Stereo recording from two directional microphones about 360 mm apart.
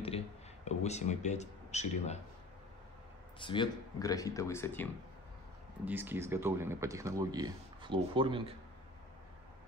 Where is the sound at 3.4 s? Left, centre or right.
Centre.